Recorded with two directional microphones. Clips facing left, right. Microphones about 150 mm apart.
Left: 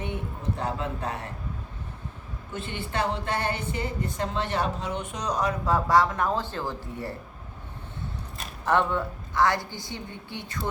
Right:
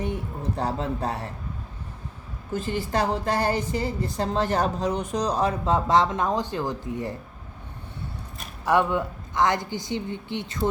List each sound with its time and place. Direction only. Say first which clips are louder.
0.0 s speech: right 3 dB; 35° right (ahead or behind)
2.5 s a woman's voice: right 7 dB; 40° right (ahead or behind); by 7.2 s 20° right (ahead or behind)
8.6 s a woman's voice: right 2 dB; 10° right (ahead or behind)